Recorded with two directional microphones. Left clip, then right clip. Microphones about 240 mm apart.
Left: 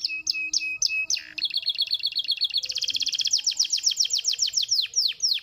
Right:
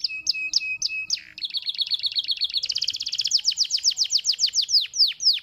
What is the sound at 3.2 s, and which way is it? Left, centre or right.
Chirp, right.